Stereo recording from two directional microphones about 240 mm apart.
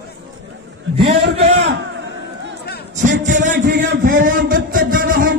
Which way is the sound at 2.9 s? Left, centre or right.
Right.